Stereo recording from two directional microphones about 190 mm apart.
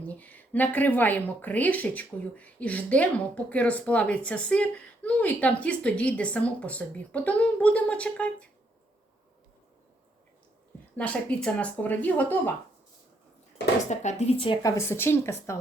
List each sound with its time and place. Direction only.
0.0 s a woman's voice: 10° left (ahead or behind)
10.9 s a woman's voice: 5° left (ahead or behind)
13.9 s speech: 40° left (ahead or behind)
14.8 s a woman's voice: 10° left (ahead or behind)